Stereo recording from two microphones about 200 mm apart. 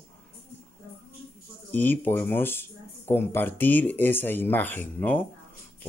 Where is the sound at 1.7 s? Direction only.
10° left (ahead or behind).